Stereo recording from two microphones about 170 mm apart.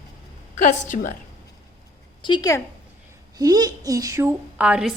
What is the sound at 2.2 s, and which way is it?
Speech, 25° left (ahead or behind).